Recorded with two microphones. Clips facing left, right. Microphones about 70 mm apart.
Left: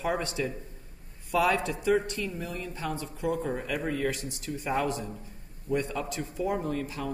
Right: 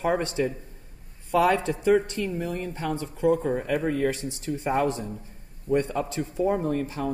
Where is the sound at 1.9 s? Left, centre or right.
Right.